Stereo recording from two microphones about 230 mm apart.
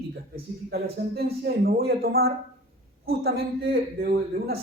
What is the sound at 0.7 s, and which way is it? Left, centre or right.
A man's voice, right.